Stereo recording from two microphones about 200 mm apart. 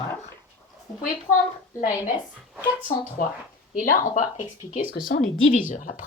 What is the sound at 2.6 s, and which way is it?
Speech, 45° left (ahead or behind).